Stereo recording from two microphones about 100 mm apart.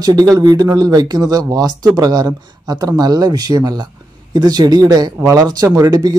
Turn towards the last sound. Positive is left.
turn(degrees=-40)  # may be behind; listen again after turning